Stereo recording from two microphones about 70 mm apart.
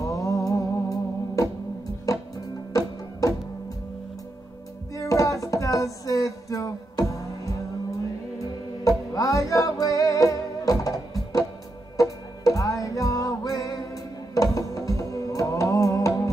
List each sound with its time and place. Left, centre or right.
0.0 s music: left
4.9 s a sound: left
8.8 s music: left